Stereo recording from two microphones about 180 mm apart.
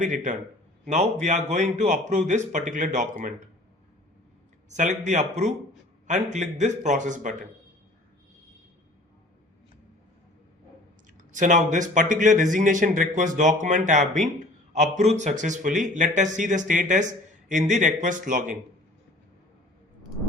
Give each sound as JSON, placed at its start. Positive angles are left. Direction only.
{"t": 0.0, "sound": "speech", "side_deg": -45}
{"t": 4.7, "sound": "a man's voice", "side_deg": -40}
{"t": 11.2, "sound": "speech", "side_deg": -45}